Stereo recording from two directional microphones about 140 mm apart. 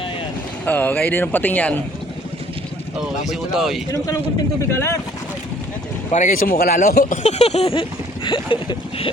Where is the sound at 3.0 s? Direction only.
5° right (ahead or behind).